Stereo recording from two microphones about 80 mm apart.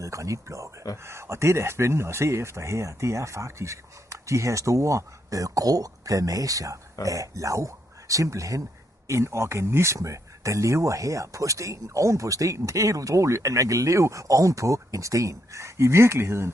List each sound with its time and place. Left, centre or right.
0.0 s speech: right